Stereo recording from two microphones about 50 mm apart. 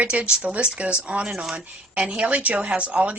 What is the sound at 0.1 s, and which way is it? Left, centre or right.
A woman's voice, right.